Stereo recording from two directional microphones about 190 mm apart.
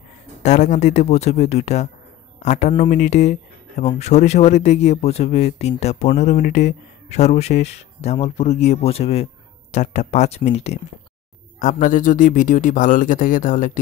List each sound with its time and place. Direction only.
0.4 s speech: 40° left (ahead or behind)
11.6 s speech: 45° left (ahead or behind)